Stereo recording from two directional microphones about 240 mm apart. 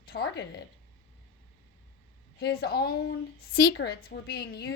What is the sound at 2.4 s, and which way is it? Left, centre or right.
A woman's voice, left.